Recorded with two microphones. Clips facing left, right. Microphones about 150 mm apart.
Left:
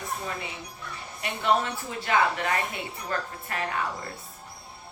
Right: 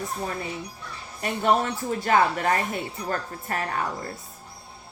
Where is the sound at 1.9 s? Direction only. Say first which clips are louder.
Right 4 dB; 40° right (ahead or behind).